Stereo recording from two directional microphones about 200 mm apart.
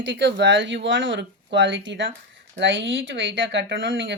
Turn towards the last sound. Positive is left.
turn(degrees=-65)  # may be behind; listen again after turning